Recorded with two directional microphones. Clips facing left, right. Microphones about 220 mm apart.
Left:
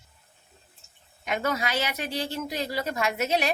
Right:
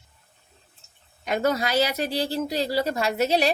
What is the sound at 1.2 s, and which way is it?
A woman's voice, 35° right (ahead or behind).